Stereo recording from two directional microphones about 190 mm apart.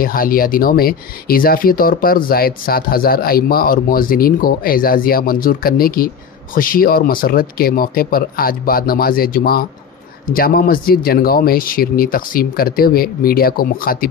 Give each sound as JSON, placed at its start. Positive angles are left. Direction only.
{"t": 0.0, "sound": "speech", "side_deg": 50}